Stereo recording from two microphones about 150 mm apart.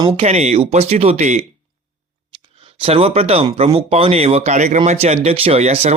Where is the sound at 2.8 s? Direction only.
40° right (ahead or behind).